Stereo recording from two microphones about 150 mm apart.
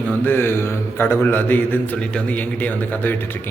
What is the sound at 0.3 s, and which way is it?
A man's voice, 15° left (ahead or behind).